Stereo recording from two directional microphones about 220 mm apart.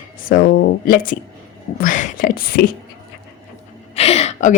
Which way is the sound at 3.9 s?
30° left (ahead or behind).